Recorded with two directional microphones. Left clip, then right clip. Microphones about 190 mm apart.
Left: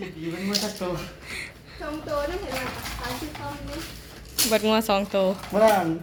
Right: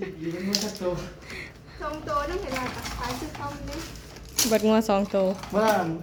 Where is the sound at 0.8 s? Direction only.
30° left (ahead or behind).